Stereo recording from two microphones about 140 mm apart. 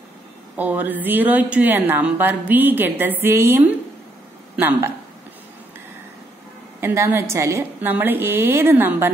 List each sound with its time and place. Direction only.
0.6 s a woman's voice: 10° right (ahead or behind)
6.8 s a woman's voice: 15° right (ahead or behind)